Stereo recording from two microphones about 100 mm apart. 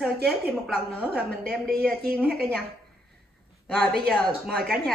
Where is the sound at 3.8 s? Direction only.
Centre (ahead or behind).